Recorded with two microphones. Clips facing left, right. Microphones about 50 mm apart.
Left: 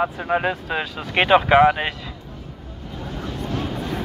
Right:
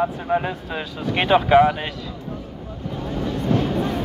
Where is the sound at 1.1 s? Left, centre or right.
Left.